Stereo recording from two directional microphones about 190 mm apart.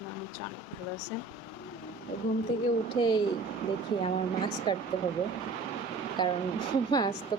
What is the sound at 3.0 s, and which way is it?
Speech, 25° left (ahead or behind).